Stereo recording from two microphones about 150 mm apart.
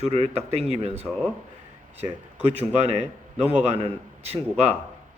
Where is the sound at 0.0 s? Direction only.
40° right (ahead or behind).